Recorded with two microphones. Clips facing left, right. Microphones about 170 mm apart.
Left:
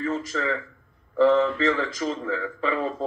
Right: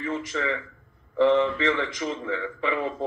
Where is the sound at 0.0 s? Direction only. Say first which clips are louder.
Left 2 dB; 35° left (ahead or behind).